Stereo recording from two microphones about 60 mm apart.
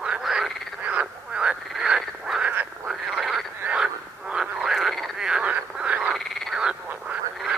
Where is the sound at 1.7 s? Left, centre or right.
Centre.